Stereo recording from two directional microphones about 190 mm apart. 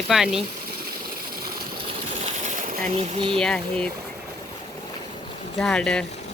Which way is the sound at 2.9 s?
35° right (ahead or behind).